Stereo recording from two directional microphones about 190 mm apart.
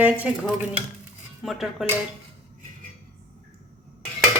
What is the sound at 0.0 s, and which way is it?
Speech, 5° right (ahead or behind).